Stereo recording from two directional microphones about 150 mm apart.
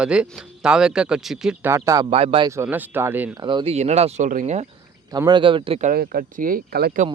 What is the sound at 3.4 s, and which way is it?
Speech, 30° right (ahead or behind).